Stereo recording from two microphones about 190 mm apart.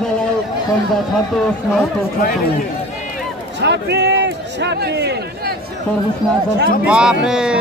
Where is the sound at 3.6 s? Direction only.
65° right (ahead or behind).